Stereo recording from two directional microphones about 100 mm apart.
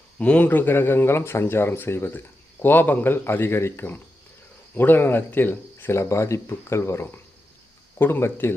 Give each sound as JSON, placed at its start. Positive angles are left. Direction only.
{"t": 0.2, "sound": "speech", "side_deg": 15}